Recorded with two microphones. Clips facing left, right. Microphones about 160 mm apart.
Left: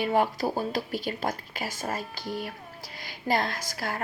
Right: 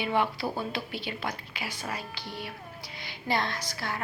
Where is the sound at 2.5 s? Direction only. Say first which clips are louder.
Left 1 dB; 45° left (ahead or behind).